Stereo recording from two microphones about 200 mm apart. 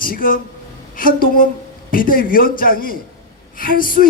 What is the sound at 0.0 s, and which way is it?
Speech, 45° left (ahead or behind).